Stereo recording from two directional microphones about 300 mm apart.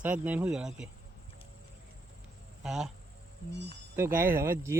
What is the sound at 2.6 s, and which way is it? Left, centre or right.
Speech, centre.